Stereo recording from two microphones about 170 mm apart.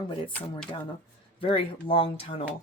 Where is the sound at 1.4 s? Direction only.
30° left (ahead or behind).